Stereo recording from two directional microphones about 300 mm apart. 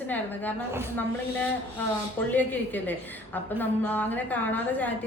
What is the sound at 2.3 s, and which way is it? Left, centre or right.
A woman's voice, centre.